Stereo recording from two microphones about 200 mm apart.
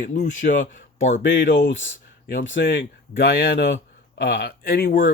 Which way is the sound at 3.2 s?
50° left (ahead or behind).